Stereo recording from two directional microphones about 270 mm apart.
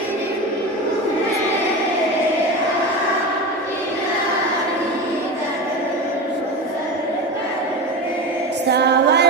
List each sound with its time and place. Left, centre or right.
8.7 s music: right